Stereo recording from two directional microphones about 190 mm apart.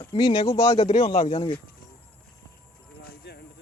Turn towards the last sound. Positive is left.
turn(degrees=60)  # may be behind; listen again after turning